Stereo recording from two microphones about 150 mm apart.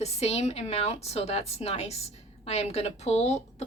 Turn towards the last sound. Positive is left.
turn(degrees=45)  # may be behind; listen again after turning